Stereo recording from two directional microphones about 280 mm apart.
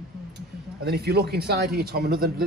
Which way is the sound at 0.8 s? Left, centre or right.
Right.